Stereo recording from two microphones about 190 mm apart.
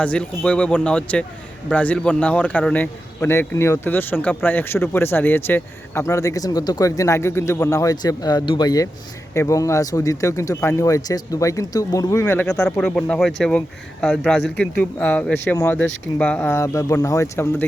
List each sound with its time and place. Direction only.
0.0 s speech: 5° left (ahead or behind)